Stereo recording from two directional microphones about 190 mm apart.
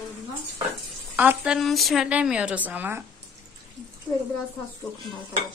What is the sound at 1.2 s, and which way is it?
A woman's voice, 10° right (ahead or behind).